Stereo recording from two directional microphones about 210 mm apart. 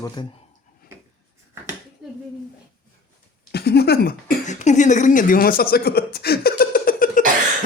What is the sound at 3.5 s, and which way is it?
Speech, 50° left (ahead or behind).